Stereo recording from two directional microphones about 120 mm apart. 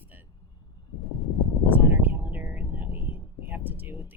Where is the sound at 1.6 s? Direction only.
15° right (ahead or behind).